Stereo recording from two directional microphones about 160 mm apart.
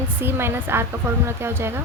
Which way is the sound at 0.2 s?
15° right (ahead or behind).